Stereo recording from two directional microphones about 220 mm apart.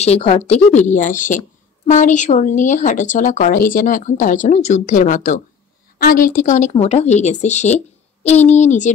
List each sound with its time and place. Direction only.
0.0 s speech: 25° left (ahead or behind)